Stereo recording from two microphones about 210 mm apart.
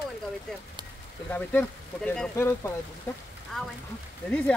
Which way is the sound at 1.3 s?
10° left (ahead or behind).